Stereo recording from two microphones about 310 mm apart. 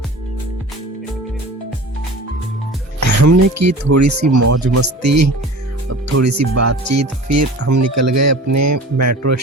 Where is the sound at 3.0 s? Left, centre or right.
Right.